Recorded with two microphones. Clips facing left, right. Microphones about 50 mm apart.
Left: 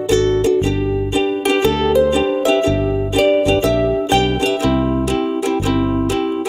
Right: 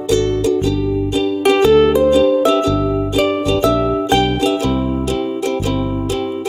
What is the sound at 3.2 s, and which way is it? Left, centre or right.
Music, left.